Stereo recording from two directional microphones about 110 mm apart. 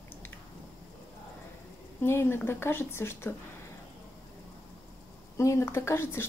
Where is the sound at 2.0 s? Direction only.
20° left (ahead or behind).